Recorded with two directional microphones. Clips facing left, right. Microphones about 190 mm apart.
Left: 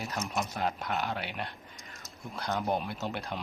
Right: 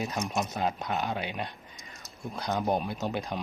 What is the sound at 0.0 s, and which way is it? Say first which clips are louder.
Speech: right 3 dB; 15° right (ahead or behind).